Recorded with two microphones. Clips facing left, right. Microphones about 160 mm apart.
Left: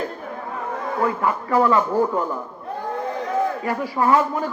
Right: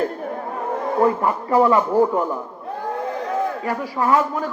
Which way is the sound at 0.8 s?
35° right (ahead or behind).